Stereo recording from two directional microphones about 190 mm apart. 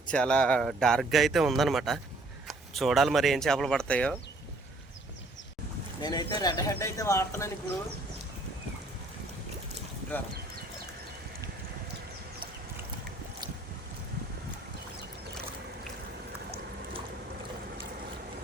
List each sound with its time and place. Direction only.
0.1 s speech: 5° left (ahead or behind)
6.0 s speech: 20° left (ahead or behind)